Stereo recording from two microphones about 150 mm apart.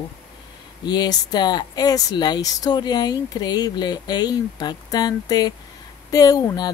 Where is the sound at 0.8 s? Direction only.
30° left (ahead or behind).